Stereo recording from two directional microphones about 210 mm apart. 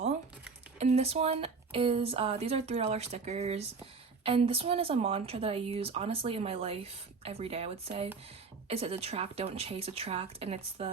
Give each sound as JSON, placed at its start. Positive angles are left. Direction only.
{"t": 0.8, "sound": "speech", "side_deg": -30}